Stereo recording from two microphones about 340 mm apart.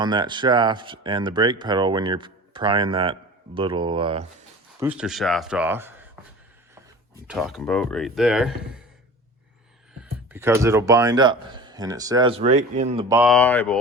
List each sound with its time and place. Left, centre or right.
0.0 s speech: centre
4.8 s speech: centre
7.3 s speech: centre
10.0 s speech: centre